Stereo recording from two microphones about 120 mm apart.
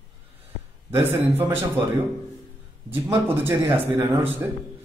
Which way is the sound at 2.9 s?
20° right (ahead or behind).